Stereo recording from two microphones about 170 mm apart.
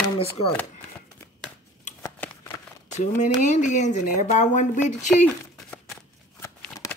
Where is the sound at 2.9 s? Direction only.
45° left (ahead or behind).